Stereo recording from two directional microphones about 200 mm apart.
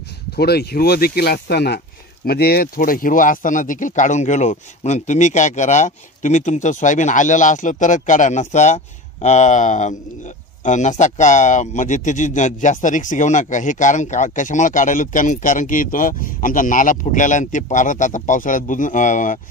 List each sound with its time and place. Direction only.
0.4 s speech: 55° left (ahead or behind)